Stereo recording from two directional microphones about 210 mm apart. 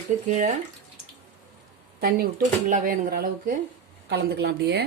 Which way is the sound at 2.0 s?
45° right (ahead or behind).